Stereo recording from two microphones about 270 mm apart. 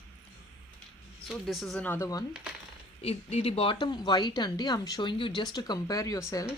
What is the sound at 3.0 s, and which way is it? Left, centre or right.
Speech, left.